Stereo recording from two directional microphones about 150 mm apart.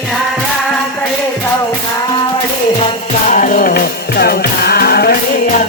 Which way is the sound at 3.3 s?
60° left (ahead or behind).